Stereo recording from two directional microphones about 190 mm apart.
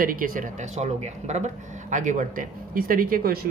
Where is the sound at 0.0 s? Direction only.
45° right (ahead or behind).